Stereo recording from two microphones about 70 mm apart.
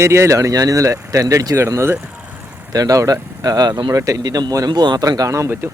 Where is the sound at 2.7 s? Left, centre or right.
Right.